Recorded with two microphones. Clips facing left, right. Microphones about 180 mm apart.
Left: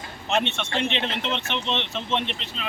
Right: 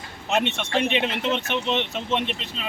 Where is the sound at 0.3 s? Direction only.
5° right (ahead or behind).